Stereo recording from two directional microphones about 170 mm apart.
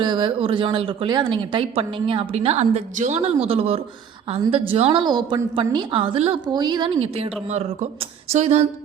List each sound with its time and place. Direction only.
0.0 s speech: 30° right (ahead or behind)